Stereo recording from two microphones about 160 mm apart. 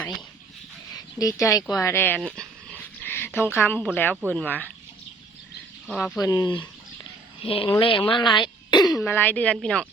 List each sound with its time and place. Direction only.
1.2 s speech: 20° left (ahead or behind); by 2.5 s 5° left (ahead or behind)
3.0 s a sound: 15° left (ahead or behind)
3.9 s speech: 10° left (ahead or behind)
5.9 s speech: 5° left (ahead or behind)
6.1 s speech: 25° left (ahead or behind)
9.0 s speech: 10° left (ahead or behind)